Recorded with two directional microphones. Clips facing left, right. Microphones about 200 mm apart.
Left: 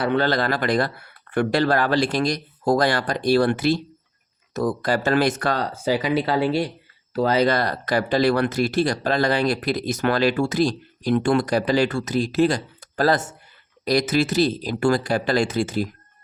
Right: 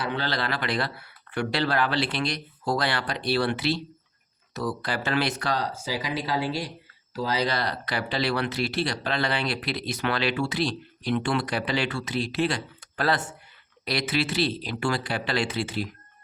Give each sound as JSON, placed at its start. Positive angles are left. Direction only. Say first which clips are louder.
{"t": 0.0, "sound": "speech", "louder": "left 8 dB", "side_deg": 55}